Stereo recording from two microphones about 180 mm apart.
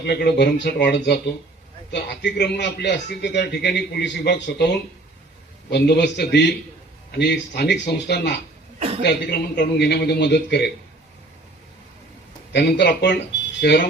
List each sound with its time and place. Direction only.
0.0 s a man's voice: 65° left (ahead or behind)
5.7 s a man's voice: 70° left (ahead or behind)
12.5 s a man's voice: 65° left (ahead or behind)